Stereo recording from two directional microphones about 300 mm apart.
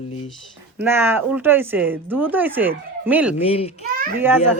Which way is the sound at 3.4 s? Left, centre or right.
Centre.